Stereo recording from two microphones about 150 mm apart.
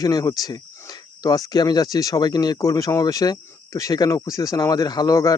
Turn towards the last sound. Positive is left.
turn(degrees=25)  # may be behind; listen again after turning